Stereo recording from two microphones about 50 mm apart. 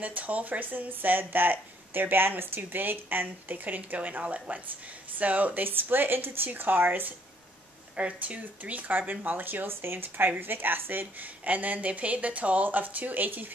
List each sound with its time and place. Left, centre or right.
0.0 s speech: right
7.9 s speech: right